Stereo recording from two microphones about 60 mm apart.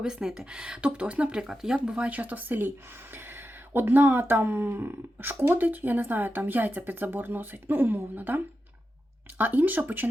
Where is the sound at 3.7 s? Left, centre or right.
Right.